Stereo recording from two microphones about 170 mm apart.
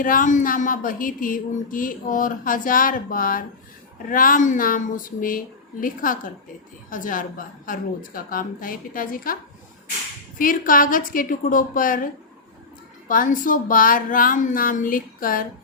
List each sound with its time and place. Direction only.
0.0 s a woman's voice: 50° left (ahead or behind)
13.1 s a woman's voice: 55° left (ahead or behind)